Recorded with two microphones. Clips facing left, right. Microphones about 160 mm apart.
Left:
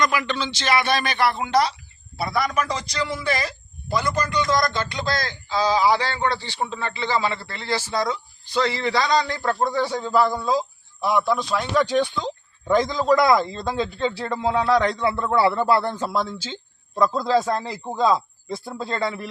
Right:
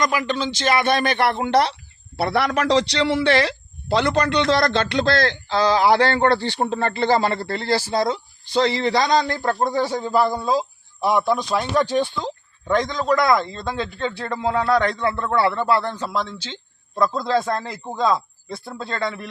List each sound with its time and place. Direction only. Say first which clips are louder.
0.0 s a man's voice: right 1 dB; 40° right (ahead or behind); by 10.5 s 10° right (ahead or behind)
11.0 s speech: right 2 dB; 20° right (ahead or behind)
12.6 s a man's voice: left 1 dB; 5° left (ahead or behind)